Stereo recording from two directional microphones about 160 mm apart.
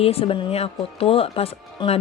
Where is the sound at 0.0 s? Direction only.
40° left (ahead or behind).